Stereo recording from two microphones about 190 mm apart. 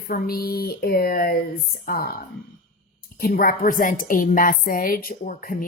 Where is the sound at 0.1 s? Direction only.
50° left (ahead or behind).